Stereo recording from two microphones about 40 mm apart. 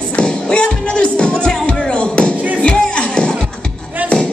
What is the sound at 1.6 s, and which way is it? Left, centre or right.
Music, left.